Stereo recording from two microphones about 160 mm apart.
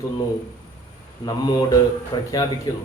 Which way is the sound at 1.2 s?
25° left (ahead or behind).